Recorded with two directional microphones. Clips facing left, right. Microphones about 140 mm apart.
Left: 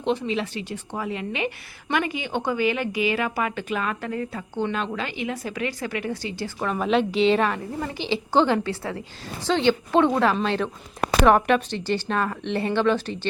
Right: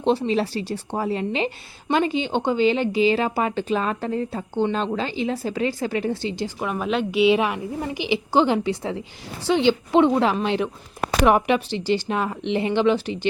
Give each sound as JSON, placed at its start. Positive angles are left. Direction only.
{"t": 0.0, "sound": "a woman's voice", "side_deg": -35}
{"t": 6.6, "sound": "a woman's voice", "side_deg": -5}